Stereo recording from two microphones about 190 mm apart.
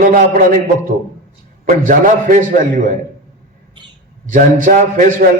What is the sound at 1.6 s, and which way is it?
A man's voice, 45° right (ahead or behind).